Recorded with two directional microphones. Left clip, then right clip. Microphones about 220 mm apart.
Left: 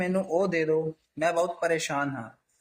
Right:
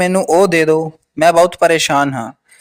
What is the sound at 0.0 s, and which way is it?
Speech, 45° right (ahead or behind).